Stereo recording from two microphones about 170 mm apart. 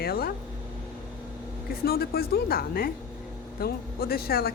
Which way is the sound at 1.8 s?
65° left (ahead or behind).